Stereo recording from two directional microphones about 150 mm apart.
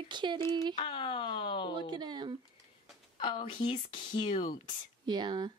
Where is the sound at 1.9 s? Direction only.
30° right (ahead or behind).